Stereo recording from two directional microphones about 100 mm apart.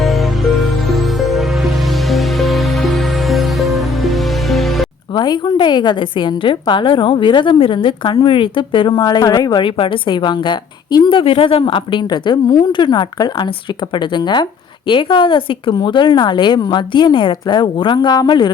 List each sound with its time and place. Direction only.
0.0 s music: centre (ahead or behind)
5.1 s a woman's voice: 45° left (ahead or behind)
9.6 s a woman's voice: 60° left (ahead or behind)